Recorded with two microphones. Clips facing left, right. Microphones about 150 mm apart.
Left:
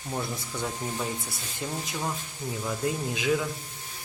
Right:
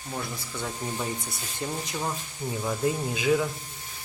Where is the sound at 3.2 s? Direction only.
5° right (ahead or behind).